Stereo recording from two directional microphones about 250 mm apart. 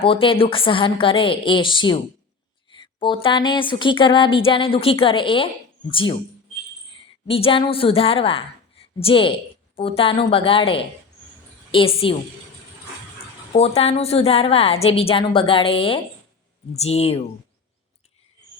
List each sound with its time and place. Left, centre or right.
0.0 s speech: left
7.3 s a woman's voice: left
13.5 s speech: left